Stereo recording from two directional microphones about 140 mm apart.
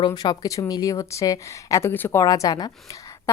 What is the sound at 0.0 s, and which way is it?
Speech, 30° left (ahead or behind).